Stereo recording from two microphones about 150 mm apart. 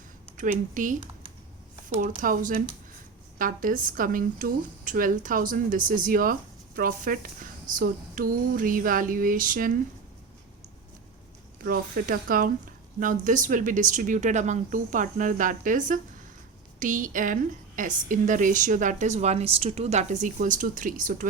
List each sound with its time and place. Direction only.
0.3 s a woman's voice: 60° right (ahead or behind)
2.0 s a woman's voice: 65° right (ahead or behind)
11.6 s a woman's voice: 80° right; by 21.2 s 60° right (ahead or behind)